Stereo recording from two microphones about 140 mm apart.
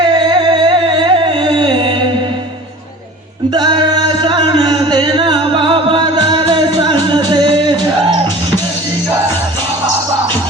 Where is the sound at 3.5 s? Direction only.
30° right (ahead or behind).